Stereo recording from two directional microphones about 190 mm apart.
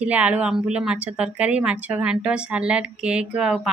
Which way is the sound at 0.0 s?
5° right (ahead or behind).